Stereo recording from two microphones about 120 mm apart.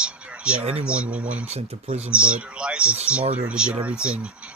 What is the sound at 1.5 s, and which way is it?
Speech, 60° right (ahead or behind).